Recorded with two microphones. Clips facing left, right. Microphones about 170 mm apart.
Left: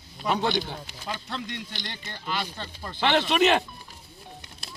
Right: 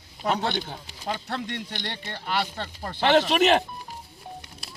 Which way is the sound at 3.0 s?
40° right (ahead or behind).